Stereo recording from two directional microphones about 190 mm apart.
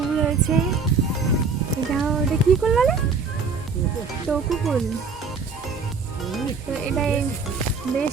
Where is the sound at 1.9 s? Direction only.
Centre (ahead or behind).